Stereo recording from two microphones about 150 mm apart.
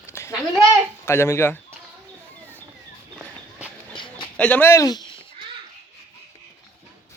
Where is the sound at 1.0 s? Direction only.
15° left (ahead or behind).